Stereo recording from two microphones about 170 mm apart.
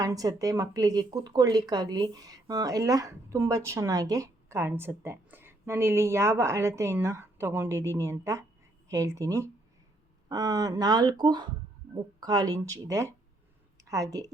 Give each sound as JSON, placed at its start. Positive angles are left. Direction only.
{"t": 0.0, "sound": "a woman's voice", "side_deg": -20}